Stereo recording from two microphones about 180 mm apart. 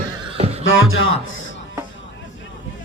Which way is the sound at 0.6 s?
90° left.